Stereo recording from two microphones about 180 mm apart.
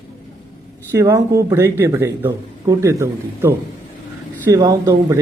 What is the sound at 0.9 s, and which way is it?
A man's voice, 15° right (ahead or behind).